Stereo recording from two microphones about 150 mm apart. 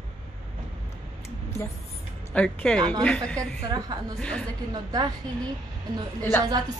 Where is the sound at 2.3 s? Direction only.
10° left (ahead or behind).